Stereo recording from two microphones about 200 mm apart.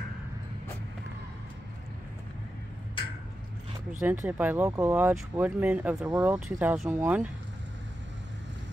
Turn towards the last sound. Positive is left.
turn(degrees=-10)  # may be behind; listen again after turning